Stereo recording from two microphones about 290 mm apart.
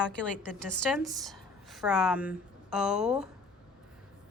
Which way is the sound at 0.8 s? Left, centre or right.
Centre.